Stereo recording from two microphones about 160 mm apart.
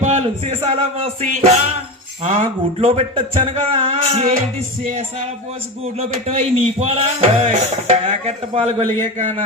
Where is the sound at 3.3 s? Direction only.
35° right (ahead or behind).